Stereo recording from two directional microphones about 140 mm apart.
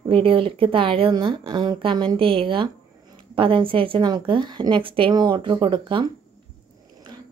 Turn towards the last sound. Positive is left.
turn(degrees=-35)  # may be behind; listen again after turning